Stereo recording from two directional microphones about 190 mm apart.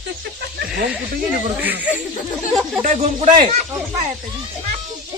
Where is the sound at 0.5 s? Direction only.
55° right (ahead or behind).